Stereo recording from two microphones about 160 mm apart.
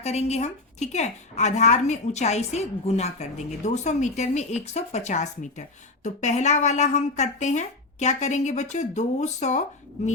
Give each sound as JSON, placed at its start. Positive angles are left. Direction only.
{"t": 0.0, "sound": "a woman's voice", "side_deg": 40}